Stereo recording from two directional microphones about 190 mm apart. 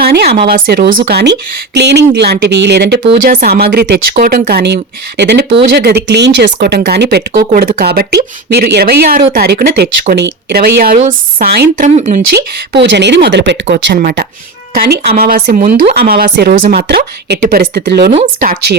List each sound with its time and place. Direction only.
0.0 s speech: 60° right (ahead or behind)
0.3 s speech: 30° right (ahead or behind)
0.5 s speech: 50° right (ahead or behind)
10.9 s speech: 40° right (ahead or behind)
12.7 s speech: 65° right (ahead or behind)
14.0 s speech: 55° right (ahead or behind)
16.0 s speech: 50° right (ahead or behind)
18.1 s speech: 40° right (ahead or behind)